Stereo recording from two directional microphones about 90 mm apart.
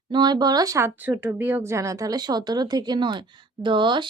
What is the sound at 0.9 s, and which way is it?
A woman's voice, 20° right (ahead or behind).